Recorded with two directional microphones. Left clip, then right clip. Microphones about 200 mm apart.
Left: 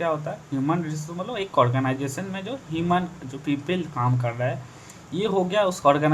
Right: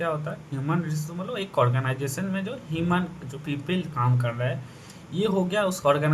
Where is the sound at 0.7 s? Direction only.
25° left (ahead or behind).